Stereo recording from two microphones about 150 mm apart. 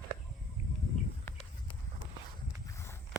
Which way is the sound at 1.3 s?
15° left (ahead or behind).